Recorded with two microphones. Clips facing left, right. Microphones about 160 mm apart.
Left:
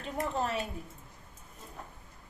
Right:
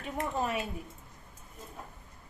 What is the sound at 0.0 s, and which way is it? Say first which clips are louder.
Speech: even; 10° right (ahead or behind).